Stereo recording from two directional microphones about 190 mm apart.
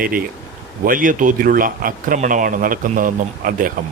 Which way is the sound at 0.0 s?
50° right (ahead or behind).